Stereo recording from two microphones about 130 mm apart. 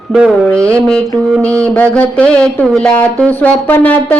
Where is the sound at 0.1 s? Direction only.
5° right (ahead or behind).